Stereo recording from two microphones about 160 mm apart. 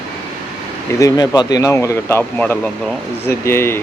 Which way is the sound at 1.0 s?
25° left (ahead or behind).